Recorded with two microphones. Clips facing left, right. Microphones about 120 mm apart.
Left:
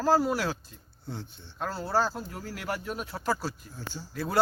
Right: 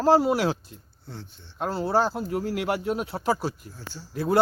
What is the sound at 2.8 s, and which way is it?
Speech, 20° right (ahead or behind).